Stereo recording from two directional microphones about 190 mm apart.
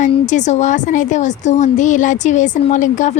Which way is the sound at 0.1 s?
40° left (ahead or behind).